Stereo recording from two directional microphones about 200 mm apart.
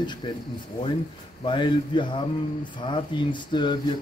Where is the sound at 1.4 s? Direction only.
25° left (ahead or behind).